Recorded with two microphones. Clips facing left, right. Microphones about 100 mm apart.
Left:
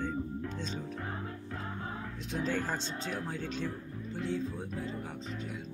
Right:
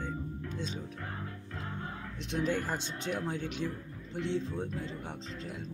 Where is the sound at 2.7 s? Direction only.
20° right (ahead or behind).